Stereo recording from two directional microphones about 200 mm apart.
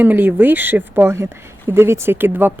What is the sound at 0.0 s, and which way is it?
Speech, 10° right (ahead or behind).